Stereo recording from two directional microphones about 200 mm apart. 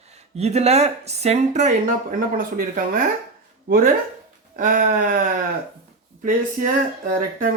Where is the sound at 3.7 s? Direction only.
45° right (ahead or behind).